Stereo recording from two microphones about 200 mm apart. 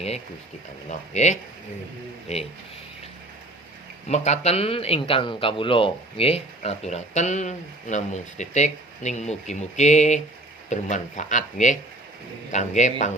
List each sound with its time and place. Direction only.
0.9 s speech: 35° left (ahead or behind)
4.1 s speech: 35° left (ahead or behind)